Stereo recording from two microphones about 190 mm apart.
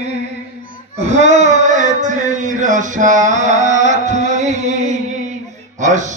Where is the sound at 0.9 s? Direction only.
35° right (ahead or behind).